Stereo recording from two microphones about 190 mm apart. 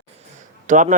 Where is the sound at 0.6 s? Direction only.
40° right (ahead or behind).